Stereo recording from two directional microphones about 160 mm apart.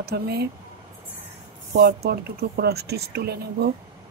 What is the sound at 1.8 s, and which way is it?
Speech, 85° right.